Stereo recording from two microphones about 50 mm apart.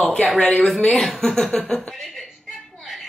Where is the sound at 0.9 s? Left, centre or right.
Centre.